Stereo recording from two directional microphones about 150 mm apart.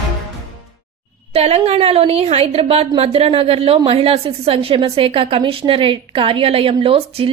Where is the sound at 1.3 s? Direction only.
45° right (ahead or behind).